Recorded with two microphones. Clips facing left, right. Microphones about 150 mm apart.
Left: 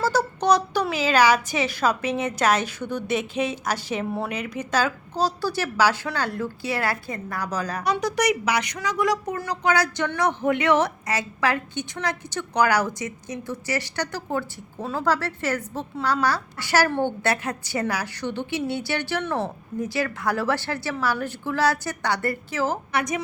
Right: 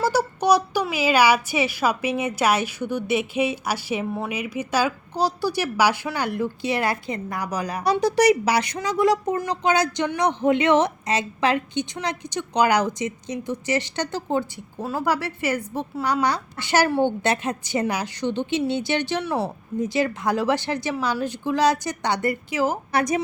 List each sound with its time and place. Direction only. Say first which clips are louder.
0.0 s a woman's voice: right 1 dB; 10° right (ahead or behind)
8.0 s a woman's voice: right 7 dB; 30° right (ahead or behind)
14.8 s a woman's voice: even; 10° right (ahead or behind)
22.9 s a woman's voice: right 4 dB; 35° right (ahead or behind)